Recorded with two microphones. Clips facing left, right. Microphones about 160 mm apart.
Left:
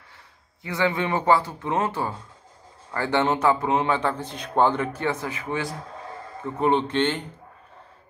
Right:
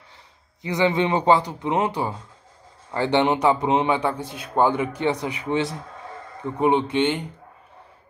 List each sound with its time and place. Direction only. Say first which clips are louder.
0.6 s a man's voice: right 4 dB; 20° right (ahead or behind)